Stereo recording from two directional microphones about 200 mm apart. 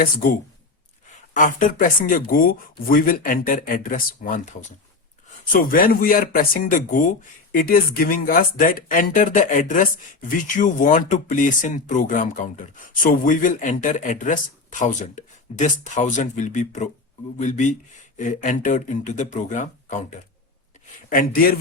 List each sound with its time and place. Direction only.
0.0 s speech: 45° left (ahead or behind)